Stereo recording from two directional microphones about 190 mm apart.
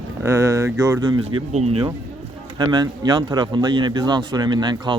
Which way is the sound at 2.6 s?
20° right (ahead or behind).